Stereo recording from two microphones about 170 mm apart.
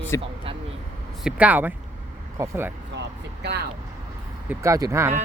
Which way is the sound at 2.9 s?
85° right.